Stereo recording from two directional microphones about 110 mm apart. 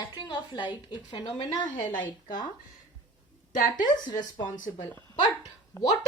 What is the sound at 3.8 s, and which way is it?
A woman's voice, 40° left (ahead or behind).